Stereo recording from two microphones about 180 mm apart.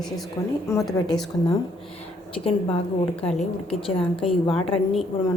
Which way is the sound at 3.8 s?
30° left (ahead or behind).